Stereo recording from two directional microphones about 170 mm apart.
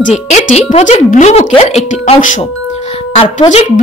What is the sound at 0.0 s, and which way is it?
A woman's voice, 45° left (ahead or behind).